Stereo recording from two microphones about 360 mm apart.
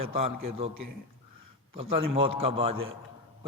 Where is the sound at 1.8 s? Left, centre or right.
Centre.